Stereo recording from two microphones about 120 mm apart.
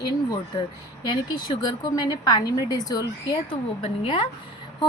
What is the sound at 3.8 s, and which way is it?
Speech, 45° left (ahead or behind).